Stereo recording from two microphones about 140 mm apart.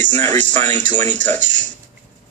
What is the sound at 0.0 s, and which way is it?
Speech, 55° right (ahead or behind).